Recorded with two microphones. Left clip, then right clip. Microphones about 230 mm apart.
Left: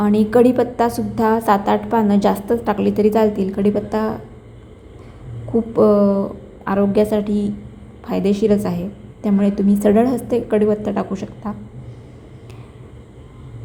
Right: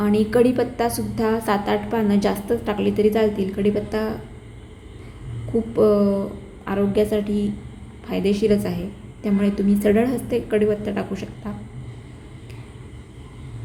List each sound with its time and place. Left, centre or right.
0.0 s a woman's voice: centre
5.7 s a woman's voice: centre